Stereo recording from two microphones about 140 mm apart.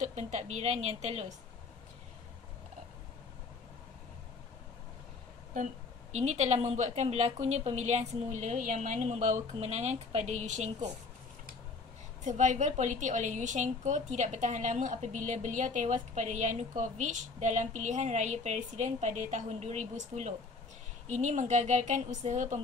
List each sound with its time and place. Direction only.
0.0 s a woman's voice: 55° right (ahead or behind)
6.1 s a woman's voice: 55° right (ahead or behind)
12.3 s a woman's voice: 60° right (ahead or behind)